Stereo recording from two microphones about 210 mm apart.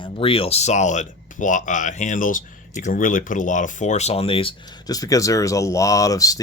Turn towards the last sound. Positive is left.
turn(degrees=15)  # may be behind; listen again after turning